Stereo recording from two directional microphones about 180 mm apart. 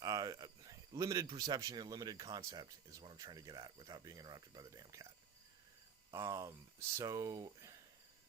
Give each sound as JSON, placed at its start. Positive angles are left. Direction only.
{"t": 0.0, "sound": "speech", "side_deg": -20}
{"t": 6.1, "sound": "speech", "side_deg": -20}